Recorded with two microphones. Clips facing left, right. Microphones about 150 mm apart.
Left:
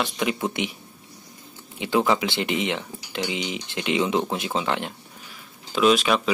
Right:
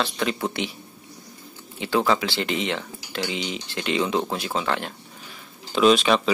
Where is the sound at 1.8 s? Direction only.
15° left (ahead or behind).